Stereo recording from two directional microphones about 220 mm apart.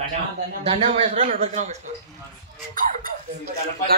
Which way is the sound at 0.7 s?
25° right (ahead or behind).